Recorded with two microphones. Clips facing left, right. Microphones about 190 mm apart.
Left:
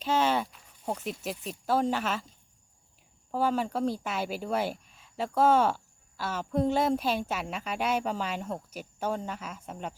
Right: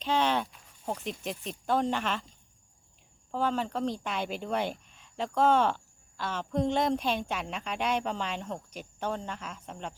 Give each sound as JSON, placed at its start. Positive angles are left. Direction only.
{"t": 0.0, "sound": "speech", "side_deg": 5}
{"t": 3.3, "sound": "speech", "side_deg": 10}